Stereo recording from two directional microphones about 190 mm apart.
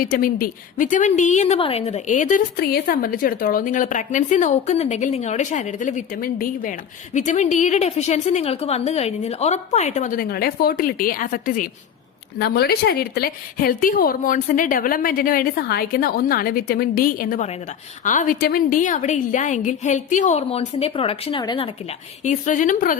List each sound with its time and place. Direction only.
0.0 s a woman's voice: 50° left (ahead or behind)
12.4 s a woman's voice: 55° left (ahead or behind); by 21.7 s 25° left (ahead or behind)
22.2 s a woman's voice: 40° left (ahead or behind)